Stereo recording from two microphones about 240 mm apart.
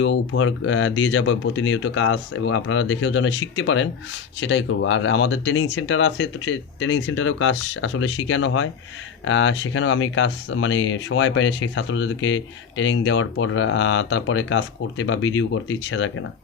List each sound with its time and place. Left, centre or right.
0.0 s speech: left